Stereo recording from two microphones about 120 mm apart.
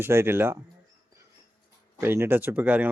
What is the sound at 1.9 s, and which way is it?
Speech, 20° right (ahead or behind).